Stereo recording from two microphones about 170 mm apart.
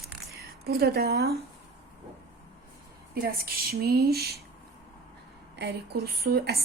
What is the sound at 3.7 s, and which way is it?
Speech, 65° right (ahead or behind).